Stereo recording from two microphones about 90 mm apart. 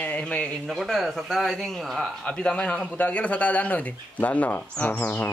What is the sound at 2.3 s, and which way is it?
A man's voice, 15° left (ahead or behind).